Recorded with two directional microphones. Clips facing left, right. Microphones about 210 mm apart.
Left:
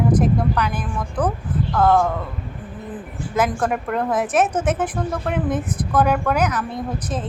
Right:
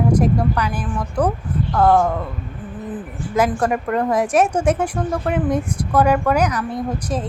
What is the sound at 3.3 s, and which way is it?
A woman's voice, 10° right (ahead or behind).